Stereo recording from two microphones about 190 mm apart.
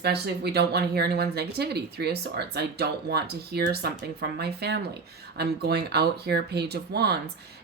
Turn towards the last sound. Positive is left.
turn(degrees=-60)  # may be behind; listen again after turning